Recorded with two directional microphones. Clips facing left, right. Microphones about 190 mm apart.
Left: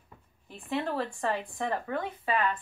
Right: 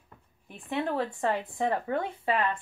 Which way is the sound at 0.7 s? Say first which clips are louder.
Right 1 dB; 20° right (ahead or behind).